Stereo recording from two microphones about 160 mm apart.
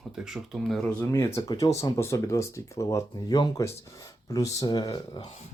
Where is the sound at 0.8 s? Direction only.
15° left (ahead or behind).